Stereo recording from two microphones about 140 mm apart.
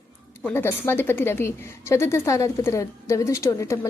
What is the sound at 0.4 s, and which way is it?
A woman's voice, 15° left (ahead or behind).